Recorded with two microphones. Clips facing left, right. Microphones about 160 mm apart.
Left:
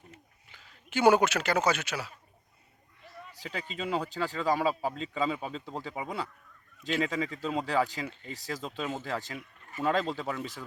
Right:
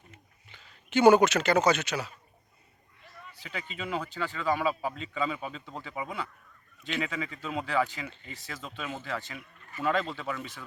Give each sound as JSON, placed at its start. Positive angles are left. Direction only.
{"t": 0.5, "sound": "a man's voice", "side_deg": 5}
{"t": 3.3, "sound": "speech", "side_deg": 35}